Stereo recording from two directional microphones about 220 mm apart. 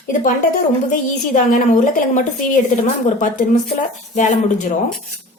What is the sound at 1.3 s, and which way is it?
Speech, 35° left (ahead or behind).